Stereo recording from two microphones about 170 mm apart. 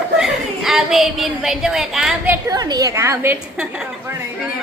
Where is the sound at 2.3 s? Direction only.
20° right (ahead or behind).